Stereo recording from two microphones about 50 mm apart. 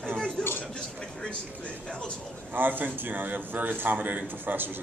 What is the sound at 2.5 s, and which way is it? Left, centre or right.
A man's voice, right.